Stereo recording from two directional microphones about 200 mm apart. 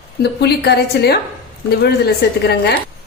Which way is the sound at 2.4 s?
55° left (ahead or behind).